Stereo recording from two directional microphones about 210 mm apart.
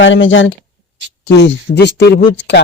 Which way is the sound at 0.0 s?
65° left (ahead or behind).